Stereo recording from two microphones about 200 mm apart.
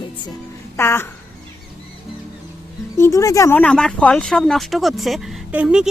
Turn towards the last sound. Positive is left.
turn(degrees=-5)  # may be behind; listen again after turning